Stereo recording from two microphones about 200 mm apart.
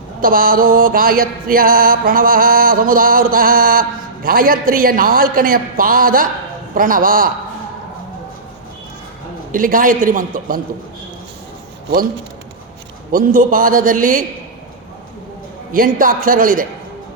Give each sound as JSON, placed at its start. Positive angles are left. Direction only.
{"t": 0.2, "sound": "music", "side_deg": -45}
{"t": 9.5, "sound": "music", "side_deg": -45}
{"t": 13.1, "sound": "music", "side_deg": -45}
{"t": 15.7, "sound": "music", "side_deg": -45}